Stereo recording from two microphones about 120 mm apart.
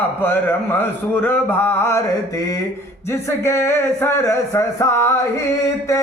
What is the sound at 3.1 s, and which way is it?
A man's voice, 20° left (ahead or behind).